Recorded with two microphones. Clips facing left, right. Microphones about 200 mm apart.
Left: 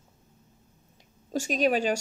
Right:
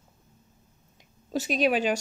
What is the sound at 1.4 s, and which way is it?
Speech, 40° left (ahead or behind).